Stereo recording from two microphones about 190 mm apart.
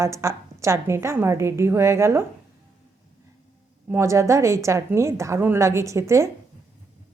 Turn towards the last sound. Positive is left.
turn(degrees=-15)  # may be behind; listen again after turning